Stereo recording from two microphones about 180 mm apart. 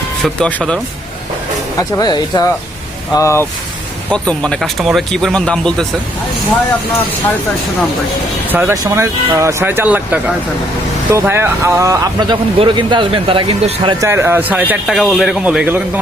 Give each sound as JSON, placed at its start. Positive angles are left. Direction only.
{"t": 0.3, "sound": "speech", "side_deg": 5}
{"t": 2.0, "sound": "speech", "side_deg": 25}
{"t": 4.1, "sound": "speech", "side_deg": 5}
{"t": 8.4, "sound": "speech", "side_deg": -10}
{"t": 14.0, "sound": "speech", "side_deg": -15}